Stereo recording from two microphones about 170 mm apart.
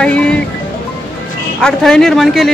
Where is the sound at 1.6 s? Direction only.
5° left (ahead or behind).